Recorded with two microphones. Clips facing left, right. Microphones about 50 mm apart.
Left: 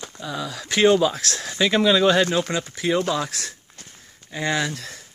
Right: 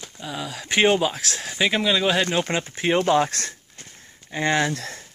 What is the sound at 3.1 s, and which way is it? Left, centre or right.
Speech, right.